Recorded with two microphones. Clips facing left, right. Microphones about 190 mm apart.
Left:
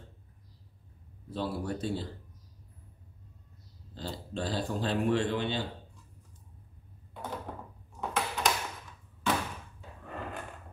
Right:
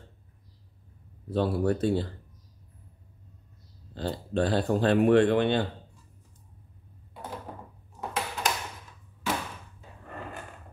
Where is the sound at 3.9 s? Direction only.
60° right (ahead or behind).